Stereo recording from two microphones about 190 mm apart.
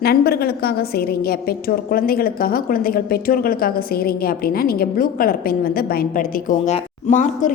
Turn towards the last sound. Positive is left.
turn(degrees=40)  # may be behind; listen again after turning